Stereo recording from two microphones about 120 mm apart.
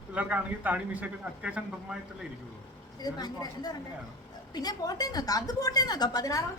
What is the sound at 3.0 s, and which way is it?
A woman's voice, 35° left (ahead or behind).